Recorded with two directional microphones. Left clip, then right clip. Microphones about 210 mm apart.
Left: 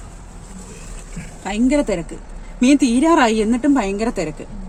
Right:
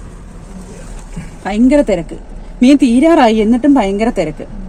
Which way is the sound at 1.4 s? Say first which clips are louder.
Right 7 dB; centre (ahead or behind).